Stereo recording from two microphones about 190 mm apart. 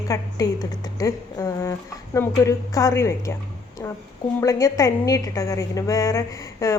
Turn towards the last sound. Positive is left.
turn(degrees=15)  # may be behind; listen again after turning